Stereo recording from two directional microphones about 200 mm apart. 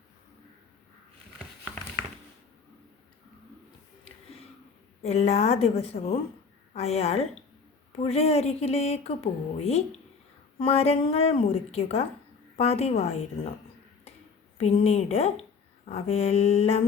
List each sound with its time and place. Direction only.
5.0 s a woman's voice: 30° left (ahead or behind)
14.6 s a woman's voice: 30° left (ahead or behind)